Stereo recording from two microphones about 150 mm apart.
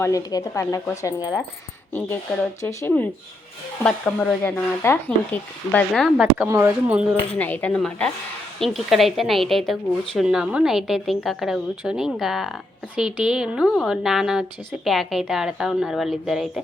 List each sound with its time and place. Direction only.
0.0 s a woman's voice: 25° left (ahead or behind)
2.6 s a woman's voice: 20° left (ahead or behind)
3.8 s speech: 5° left (ahead or behind)
6.5 s speech: 15° right (ahead or behind)
7.3 s a woman's voice: 10° left (ahead or behind)